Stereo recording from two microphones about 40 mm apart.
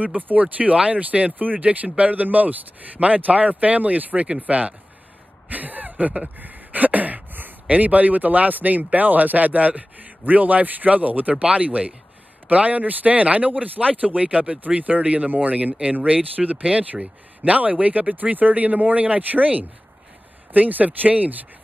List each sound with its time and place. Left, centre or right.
0.0 s speech: right
6.2 s a sound: right
7.6 s speech: right